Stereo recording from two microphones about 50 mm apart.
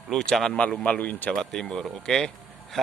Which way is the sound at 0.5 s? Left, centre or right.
Left.